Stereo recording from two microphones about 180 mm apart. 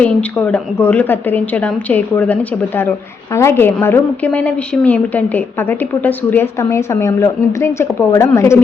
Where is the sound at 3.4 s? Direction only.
15° left (ahead or behind).